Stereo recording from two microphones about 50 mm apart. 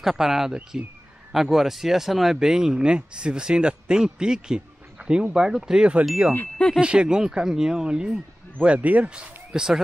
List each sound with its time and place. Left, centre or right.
0.0 s speech: centre
8.6 s speech: right